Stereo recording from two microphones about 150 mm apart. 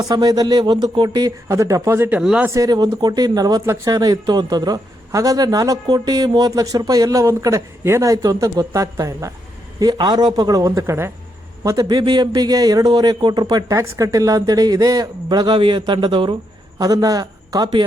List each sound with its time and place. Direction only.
0.0 s speech: 25° right (ahead or behind); by 2.5 s 5° right (ahead or behind)
2.5 s speech: 25° right (ahead or behind)